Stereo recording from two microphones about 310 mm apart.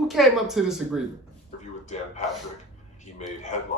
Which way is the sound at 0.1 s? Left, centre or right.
Centre.